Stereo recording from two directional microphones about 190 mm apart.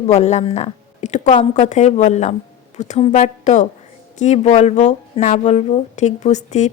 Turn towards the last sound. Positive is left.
turn(degrees=40)  # may be behind; listen again after turning